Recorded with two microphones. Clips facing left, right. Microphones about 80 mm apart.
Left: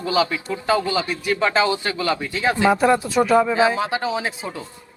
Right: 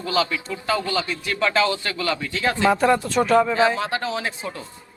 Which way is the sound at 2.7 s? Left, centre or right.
Centre.